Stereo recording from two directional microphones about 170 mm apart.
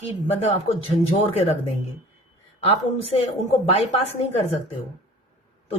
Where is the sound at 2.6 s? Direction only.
35° left (ahead or behind).